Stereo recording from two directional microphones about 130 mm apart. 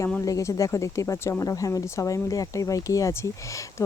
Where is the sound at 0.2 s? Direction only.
25° left (ahead or behind).